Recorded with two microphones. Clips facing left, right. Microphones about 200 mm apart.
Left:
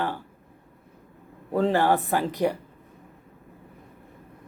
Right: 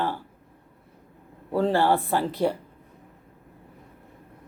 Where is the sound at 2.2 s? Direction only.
15° left (ahead or behind).